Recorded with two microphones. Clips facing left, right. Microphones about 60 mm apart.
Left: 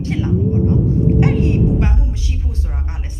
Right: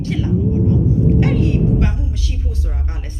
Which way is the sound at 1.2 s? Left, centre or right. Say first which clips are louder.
Left 1 dB; left.